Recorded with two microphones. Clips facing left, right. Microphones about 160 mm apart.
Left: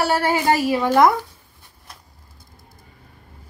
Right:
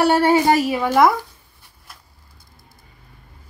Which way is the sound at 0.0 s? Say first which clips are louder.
Right 4 dB; 20° right (ahead or behind).